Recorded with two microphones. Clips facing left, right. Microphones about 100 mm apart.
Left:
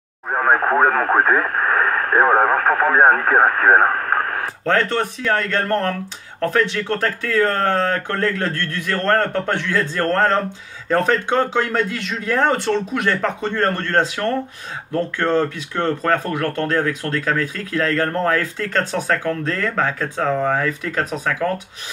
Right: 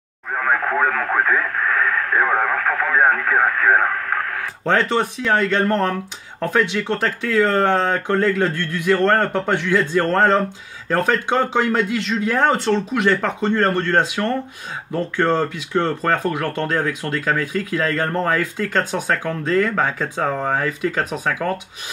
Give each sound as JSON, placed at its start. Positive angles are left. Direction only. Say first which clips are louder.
{"t": 0.3, "sound": "speech", "louder": "left 4 dB", "side_deg": 35}
{"t": 4.6, "sound": "speech", "louder": "right 1 dB", "side_deg": -10}